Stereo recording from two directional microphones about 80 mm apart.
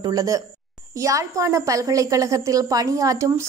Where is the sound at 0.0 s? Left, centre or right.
Right.